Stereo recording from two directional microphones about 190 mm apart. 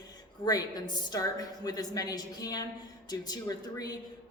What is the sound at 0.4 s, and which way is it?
A man's voice, 20° left (ahead or behind).